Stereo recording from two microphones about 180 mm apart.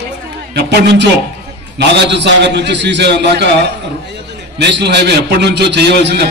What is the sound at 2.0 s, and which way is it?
A man's voice, 70° right (ahead or behind).